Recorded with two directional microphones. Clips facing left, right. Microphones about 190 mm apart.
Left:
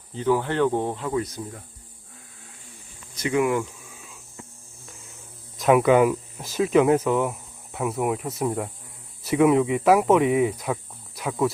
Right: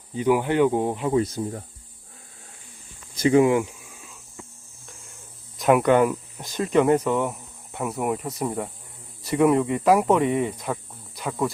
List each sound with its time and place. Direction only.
0.1 s speech: 15° right (ahead or behind)
1.1 s speech: 30° right (ahead or behind)
3.2 s speech: 30° right (ahead or behind)
3.5 s speech: 15° right (ahead or behind)
5.5 s speech: centre (ahead or behind)